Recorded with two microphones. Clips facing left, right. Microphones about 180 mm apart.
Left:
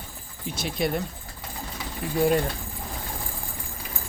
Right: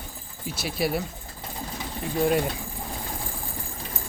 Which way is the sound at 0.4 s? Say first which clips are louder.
Even; 5° right (ahead or behind).